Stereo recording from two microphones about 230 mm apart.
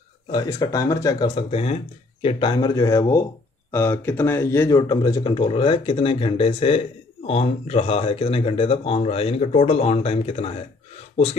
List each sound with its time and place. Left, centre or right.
0.3 s speech: centre